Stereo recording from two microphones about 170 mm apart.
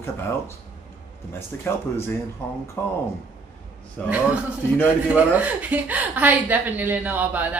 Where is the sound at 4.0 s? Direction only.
10° left (ahead or behind).